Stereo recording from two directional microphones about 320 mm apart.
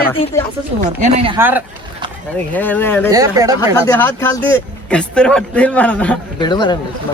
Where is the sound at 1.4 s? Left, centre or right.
Centre.